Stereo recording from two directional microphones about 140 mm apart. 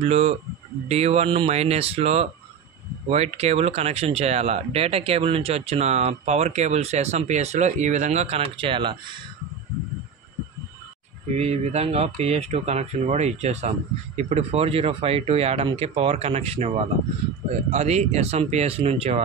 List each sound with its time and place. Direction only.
0.0 s speech: 50° right (ahead or behind)
11.3 s speech: 50° right (ahead or behind)